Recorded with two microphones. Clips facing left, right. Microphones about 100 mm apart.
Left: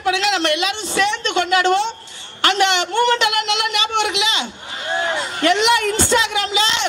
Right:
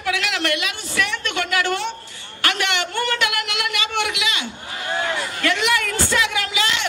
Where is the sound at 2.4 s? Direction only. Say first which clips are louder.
Left 6 dB; 25° left (ahead or behind).